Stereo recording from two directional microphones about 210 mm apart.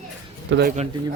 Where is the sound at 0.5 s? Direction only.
60° right (ahead or behind).